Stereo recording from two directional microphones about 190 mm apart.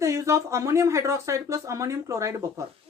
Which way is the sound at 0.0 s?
15° right (ahead or behind).